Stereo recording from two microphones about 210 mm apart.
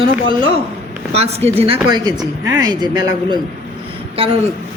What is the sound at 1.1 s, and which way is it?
Speech, 30° right (ahead or behind).